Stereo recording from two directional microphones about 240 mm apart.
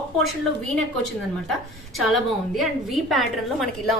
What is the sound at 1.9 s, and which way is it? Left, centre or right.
A woman's voice, centre.